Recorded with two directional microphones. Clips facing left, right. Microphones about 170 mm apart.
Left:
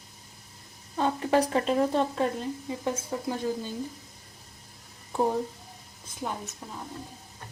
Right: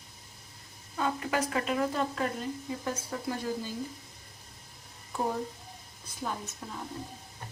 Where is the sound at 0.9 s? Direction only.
30° left (ahead or behind).